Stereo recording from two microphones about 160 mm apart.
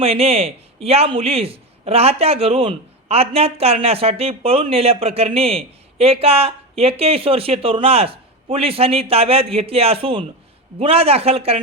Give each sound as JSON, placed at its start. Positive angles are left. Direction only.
{"t": 0.0, "sound": "a man's voice", "side_deg": -40}